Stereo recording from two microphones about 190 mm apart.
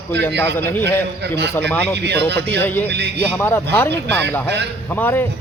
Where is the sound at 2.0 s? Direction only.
65° right (ahead or behind).